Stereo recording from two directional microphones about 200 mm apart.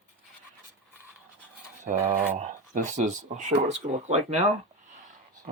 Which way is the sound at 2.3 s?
35° right (ahead or behind).